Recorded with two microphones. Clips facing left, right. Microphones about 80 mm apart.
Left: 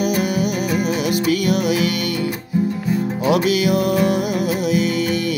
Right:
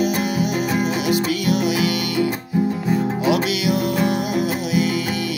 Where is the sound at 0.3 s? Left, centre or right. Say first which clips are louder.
Left 1 dB; left.